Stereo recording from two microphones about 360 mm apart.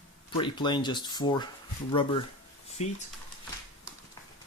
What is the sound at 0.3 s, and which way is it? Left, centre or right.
Speech, centre.